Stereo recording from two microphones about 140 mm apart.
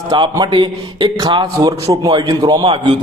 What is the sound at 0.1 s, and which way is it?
A man's voice, 30° right (ahead or behind).